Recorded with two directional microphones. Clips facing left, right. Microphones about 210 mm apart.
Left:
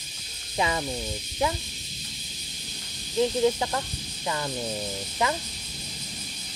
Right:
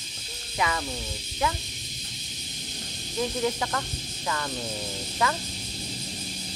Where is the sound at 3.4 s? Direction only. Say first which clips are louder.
Left 4 dB; 20° left (ahead or behind).